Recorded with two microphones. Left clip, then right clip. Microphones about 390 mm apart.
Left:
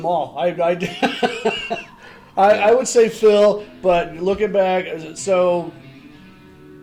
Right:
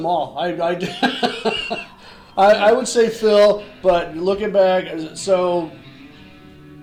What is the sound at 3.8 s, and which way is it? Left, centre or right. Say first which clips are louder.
A man's voice: even; left.